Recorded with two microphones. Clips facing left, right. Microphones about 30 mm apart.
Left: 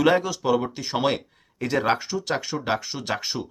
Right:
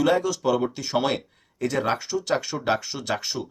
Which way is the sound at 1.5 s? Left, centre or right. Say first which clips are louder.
Left 2 dB; left.